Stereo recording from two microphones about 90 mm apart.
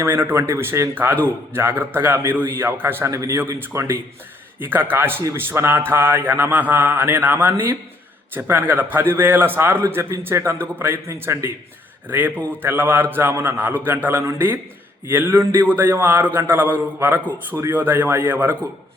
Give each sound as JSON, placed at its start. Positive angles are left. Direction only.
{"t": 0.0, "sound": "speech", "side_deg": -25}
{"t": 12.0, "sound": "speech", "side_deg": -20}